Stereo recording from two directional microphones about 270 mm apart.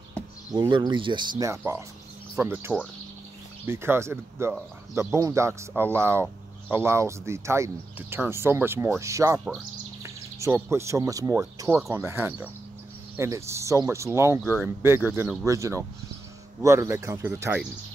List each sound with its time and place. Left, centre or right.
0.5 s speech: centre